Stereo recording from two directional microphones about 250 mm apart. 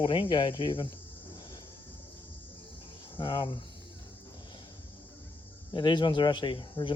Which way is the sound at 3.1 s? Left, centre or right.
Centre.